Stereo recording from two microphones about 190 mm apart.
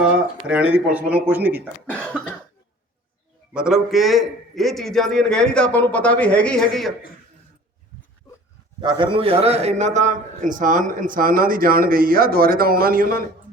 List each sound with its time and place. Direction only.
0.4 s speech: 5° right (ahead or behind)
1.9 s a man's voice: 5° left (ahead or behind)
3.5 s a man's voice: 5° right (ahead or behind)
8.8 s a man's voice: 25° right (ahead or behind); by 13.2 s 50° right (ahead or behind)